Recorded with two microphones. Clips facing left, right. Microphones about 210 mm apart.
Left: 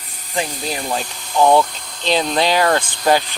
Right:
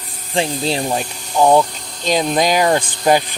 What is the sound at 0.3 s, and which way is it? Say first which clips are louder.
Speech: right 5 dB; 30° right (ahead or behind).